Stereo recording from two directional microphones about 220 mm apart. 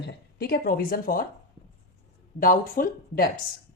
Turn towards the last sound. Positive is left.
turn(degrees=40)  # may be behind; listen again after turning